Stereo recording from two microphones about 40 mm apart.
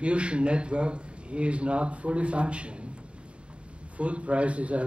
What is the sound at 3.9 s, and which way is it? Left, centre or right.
Speech, right.